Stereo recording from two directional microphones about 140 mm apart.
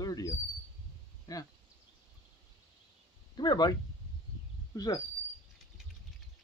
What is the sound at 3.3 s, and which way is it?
Speech, 30° left (ahead or behind).